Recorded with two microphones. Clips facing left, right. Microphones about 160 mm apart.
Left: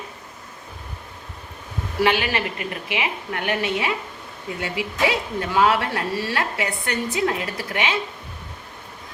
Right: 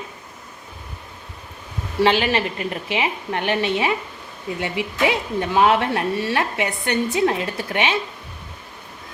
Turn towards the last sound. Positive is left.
turn(degrees=-25)  # may be behind; listen again after turning